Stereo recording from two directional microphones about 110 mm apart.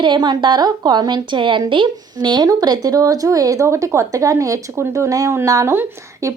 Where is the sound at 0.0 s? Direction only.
45° right (ahead or behind).